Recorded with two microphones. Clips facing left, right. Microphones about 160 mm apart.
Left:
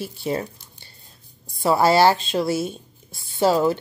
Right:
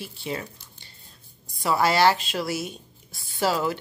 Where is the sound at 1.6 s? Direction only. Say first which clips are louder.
Left 4 dB; 30° left (ahead or behind).